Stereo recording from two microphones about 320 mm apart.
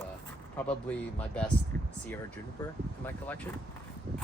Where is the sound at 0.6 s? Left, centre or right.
Centre.